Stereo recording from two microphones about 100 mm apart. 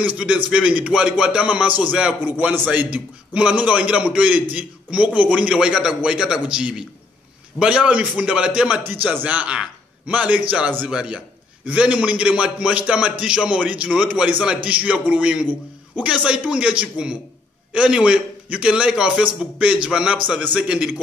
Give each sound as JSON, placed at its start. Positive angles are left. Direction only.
{"t": 0.0, "sound": "a man's voice", "side_deg": -10}